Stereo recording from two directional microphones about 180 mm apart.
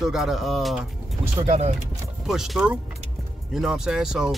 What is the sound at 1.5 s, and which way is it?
Speech, 40° right (ahead or behind).